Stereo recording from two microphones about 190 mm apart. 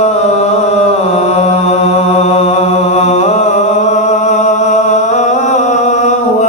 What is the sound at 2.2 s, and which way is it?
Mantra, 35° left (ahead or behind).